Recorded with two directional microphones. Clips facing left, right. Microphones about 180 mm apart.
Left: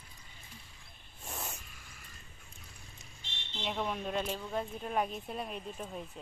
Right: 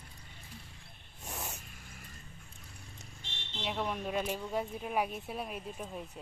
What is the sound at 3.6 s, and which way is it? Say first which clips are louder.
A woman's voice: even; centre (ahead or behind).